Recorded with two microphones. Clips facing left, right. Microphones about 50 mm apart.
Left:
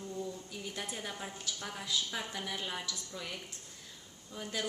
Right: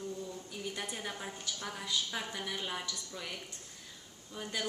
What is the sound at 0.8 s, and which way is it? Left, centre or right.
A woman's voice, centre.